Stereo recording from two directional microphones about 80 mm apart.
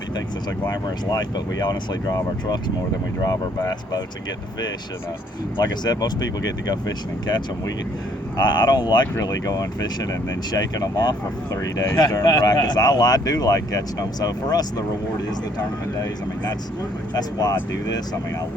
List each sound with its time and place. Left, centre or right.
0.7 s speech: left
5.5 s speech: left
9.2 s speech: left
11.5 s speech: left
11.9 s speech: left
17.2 s speech: left